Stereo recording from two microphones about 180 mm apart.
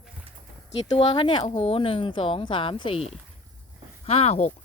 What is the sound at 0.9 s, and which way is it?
Speech, 30° left (ahead or behind).